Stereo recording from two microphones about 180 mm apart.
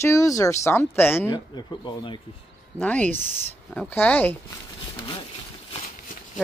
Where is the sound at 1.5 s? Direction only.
25° left (ahead or behind).